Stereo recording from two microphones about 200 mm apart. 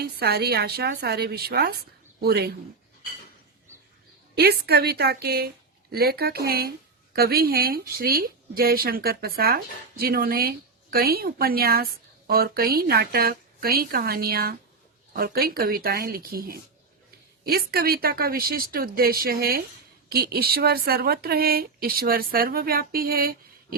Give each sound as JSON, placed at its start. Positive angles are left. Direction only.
{"t": 0.0, "sound": "a woman's voice", "side_deg": -50}
{"t": 4.4, "sound": "a woman's voice", "side_deg": -50}